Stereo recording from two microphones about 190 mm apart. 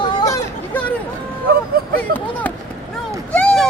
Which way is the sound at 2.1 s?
10° left (ahead or behind).